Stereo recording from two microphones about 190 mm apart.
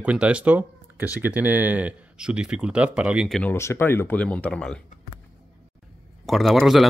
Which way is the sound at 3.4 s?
10° left (ahead or behind).